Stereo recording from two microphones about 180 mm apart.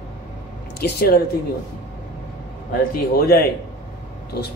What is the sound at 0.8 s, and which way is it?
Speech, 65° left (ahead or behind).